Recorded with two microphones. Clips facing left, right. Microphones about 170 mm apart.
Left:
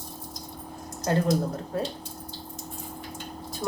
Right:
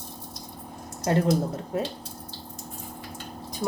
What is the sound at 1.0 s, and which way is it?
Speech, 25° right (ahead or behind).